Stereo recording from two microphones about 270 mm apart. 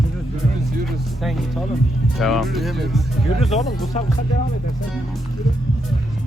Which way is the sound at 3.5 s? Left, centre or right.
Left.